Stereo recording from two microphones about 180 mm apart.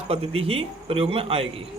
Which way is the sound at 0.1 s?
35° right (ahead or behind).